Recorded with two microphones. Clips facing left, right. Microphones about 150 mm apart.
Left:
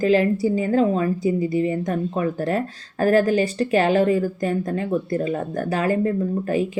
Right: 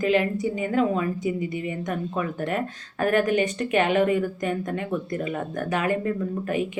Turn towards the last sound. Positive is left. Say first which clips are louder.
# left 4 dB
turn(degrees=35)  # may be behind; listen again after turning